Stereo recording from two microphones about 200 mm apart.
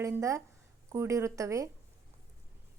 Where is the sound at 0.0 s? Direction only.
15° right (ahead or behind).